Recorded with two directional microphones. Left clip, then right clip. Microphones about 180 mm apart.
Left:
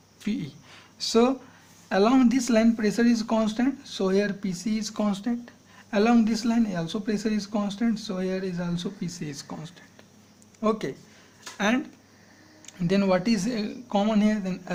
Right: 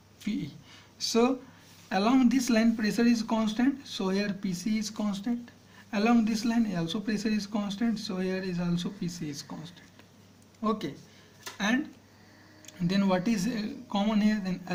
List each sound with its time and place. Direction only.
0.2 s speech: 30° left (ahead or behind)